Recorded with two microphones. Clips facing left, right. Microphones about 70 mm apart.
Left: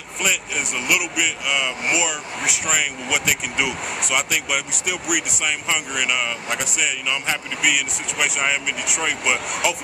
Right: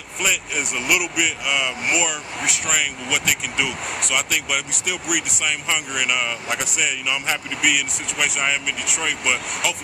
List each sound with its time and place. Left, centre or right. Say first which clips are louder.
0.2 s speech: even; centre